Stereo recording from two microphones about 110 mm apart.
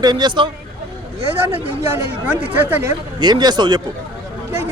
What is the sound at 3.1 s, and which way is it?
Speech, 40° right (ahead or behind).